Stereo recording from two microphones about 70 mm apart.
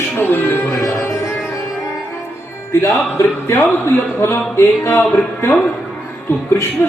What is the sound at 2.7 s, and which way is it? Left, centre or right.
Speech, left.